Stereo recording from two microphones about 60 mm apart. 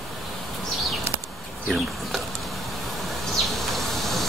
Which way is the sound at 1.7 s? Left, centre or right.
Centre.